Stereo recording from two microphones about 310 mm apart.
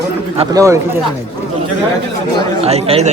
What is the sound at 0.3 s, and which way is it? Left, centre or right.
Speech, centre.